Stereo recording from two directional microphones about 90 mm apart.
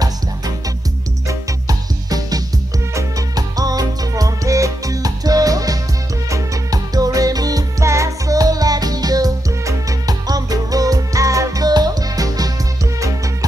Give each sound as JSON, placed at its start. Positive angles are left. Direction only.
{"t": 1.7, "sound": "music", "side_deg": -45}